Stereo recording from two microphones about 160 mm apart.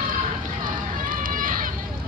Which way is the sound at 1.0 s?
60° right (ahead or behind).